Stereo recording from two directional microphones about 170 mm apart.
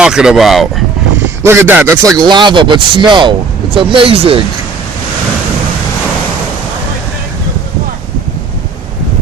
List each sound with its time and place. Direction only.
0.0 s speech: 5° right (ahead or behind)
1.4 s a man's voice: 15° right (ahead or behind); by 4.4 s 30° right (ahead or behind)